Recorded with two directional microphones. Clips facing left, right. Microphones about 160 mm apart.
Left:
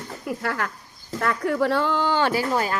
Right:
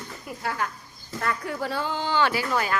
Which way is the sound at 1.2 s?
55° left (ahead or behind).